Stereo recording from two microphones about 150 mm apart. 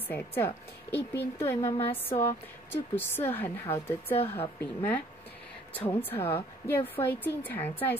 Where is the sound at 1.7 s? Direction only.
40° left (ahead or behind).